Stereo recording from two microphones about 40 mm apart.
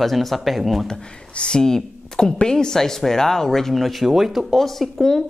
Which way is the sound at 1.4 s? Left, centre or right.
Centre.